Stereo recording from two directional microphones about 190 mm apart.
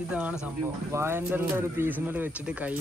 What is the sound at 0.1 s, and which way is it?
Speech, 5° right (ahead or behind).